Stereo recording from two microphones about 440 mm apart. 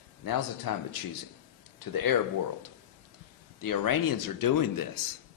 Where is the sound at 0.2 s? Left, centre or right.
Left.